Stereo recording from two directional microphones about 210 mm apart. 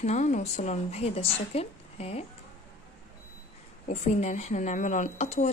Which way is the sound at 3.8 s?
30° left (ahead or behind).